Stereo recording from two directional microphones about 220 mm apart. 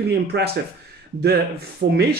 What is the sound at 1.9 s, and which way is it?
Speech, 45° right (ahead or behind).